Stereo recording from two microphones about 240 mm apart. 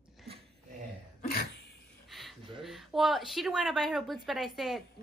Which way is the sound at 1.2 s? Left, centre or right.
Left.